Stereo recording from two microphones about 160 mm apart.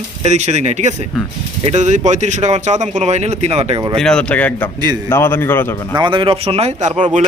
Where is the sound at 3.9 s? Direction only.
5° left (ahead or behind).